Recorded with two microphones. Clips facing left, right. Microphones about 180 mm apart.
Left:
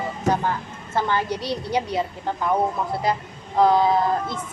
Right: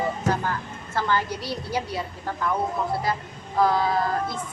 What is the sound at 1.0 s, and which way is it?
A woman's voice, 20° left (ahead or behind).